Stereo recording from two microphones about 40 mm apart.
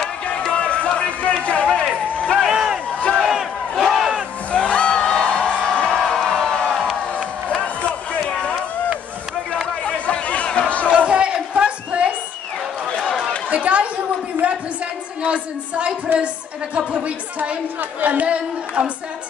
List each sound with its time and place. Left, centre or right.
0.5 s music: left
1.4 s a sound: left
2.1 s run: left
2.5 s crowd: centre
3.2 s battle cry: centre
4.6 s a sound: left
7.2 s crowd: left
8.3 s run: left
9.8 s chatter: left
10.9 s crowd: right
15.2 s a sound: right
18.0 s speech: right